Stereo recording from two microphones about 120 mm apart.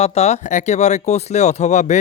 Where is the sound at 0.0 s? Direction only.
60° left (ahead or behind).